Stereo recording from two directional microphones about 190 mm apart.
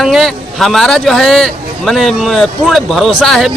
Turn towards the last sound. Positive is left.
turn(degrees=0)  # may be behind; listen again after turning